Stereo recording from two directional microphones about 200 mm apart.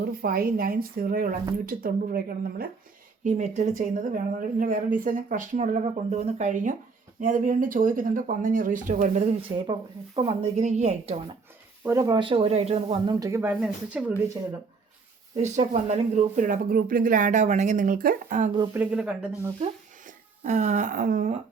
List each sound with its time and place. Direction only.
0.1 s speech: 50° right (ahead or behind)
3.2 s speech: 35° right (ahead or behind)
11.9 s speech: 15° right (ahead or behind)
15.4 s speech: 35° right (ahead or behind)
18.7 s speech: 10° right (ahead or behind)
20.1 s speech: 35° right (ahead or behind)